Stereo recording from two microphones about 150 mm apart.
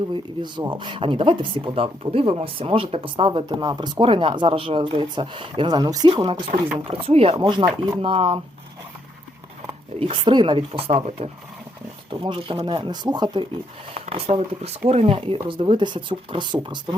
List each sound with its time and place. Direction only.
0.1 s speech: 30° right (ahead or behind)
10.0 s speech: 35° right (ahead or behind)
13.9 s speech: 40° right (ahead or behind)